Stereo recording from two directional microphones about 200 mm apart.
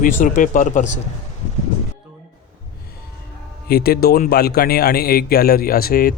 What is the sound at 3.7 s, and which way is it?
Speech, 50° left (ahead or behind).